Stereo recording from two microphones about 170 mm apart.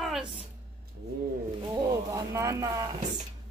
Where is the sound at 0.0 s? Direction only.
Centre (ahead or behind).